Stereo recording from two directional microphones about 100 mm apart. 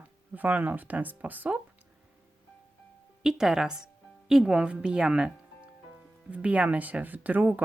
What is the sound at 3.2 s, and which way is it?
Speech, 5° right (ahead or behind).